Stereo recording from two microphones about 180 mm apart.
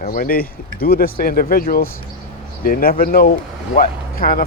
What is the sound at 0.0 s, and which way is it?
Speech, 50° left (ahead or behind).